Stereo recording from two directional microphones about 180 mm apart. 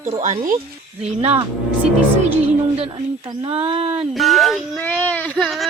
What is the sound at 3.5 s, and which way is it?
Speech, 30° right (ahead or behind).